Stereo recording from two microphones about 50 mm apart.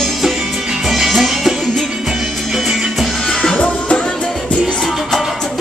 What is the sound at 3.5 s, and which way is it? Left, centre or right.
Music, centre.